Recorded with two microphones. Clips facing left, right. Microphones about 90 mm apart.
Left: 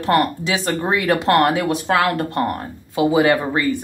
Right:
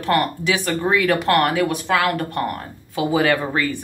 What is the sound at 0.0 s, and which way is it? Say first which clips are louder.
Speech: left 2 dB; 25° left (ahead or behind).